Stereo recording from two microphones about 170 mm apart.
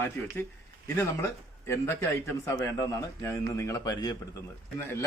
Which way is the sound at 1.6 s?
15° left (ahead or behind).